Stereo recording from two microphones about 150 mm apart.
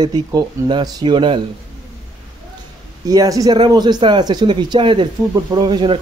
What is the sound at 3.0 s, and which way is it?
Speech, 25° right (ahead or behind).